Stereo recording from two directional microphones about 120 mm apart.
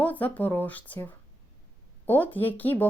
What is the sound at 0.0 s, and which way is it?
A woman's voice, 15° left (ahead or behind).